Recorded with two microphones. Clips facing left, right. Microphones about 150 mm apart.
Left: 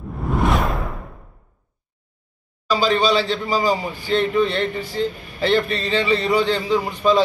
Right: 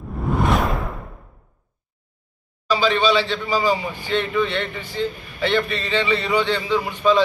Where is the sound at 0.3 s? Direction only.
Centre (ahead or behind).